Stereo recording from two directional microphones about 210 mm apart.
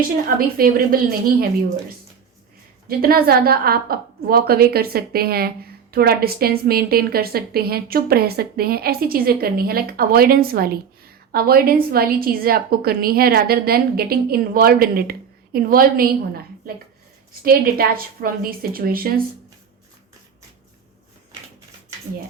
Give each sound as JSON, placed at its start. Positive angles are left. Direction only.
{"t": 0.3, "sound": "a woman's voice", "side_deg": -45}
{"t": 2.8, "sound": "a woman's voice", "side_deg": -45}